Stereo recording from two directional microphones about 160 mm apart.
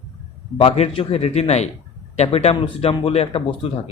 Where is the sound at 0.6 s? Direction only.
35° left (ahead or behind).